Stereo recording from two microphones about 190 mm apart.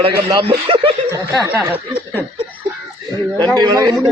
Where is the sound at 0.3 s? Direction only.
25° right (ahead or behind).